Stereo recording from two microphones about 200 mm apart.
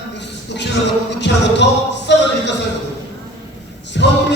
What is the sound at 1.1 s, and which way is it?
Speech, 60° left (ahead or behind).